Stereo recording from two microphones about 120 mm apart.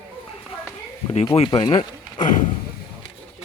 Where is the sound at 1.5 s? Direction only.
50° left (ahead or behind).